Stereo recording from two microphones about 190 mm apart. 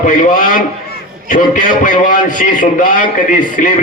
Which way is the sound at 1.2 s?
40° left (ahead or behind).